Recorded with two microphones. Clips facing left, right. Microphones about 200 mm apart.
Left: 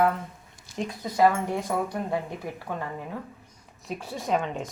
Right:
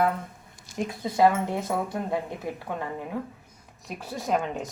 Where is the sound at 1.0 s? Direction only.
25° right (ahead or behind).